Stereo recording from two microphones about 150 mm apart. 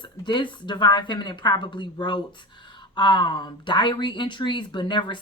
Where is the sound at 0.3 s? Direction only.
30° left (ahead or behind).